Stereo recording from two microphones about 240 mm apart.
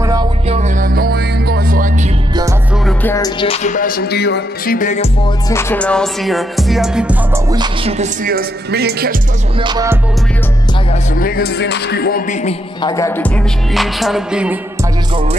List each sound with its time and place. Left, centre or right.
0.0 s music: centre; by 2.0 s right
3.0 s music: centre
3.3 s music: left
5.5 s music: centre
7.5 s speech: centre
8.0 s speech: right
9.6 s speech: centre
10.9 s music: left
12.8 s music: centre
13.7 s music: centre